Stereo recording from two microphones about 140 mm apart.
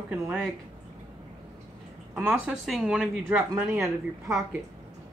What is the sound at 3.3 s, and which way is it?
Speech, 15° right (ahead or behind).